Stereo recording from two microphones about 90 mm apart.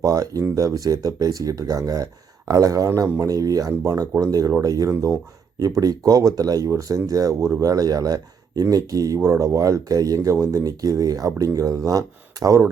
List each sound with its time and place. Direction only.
0.0 s a man's voice: 40° right (ahead or behind)